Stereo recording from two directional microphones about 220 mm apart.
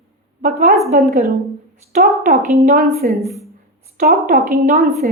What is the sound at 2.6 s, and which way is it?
A woman's voice, 40° right (ahead or behind).